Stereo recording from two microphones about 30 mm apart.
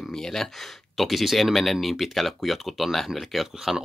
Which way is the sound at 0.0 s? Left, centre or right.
Centre.